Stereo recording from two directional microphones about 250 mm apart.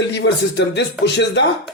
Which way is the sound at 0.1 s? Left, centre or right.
Left.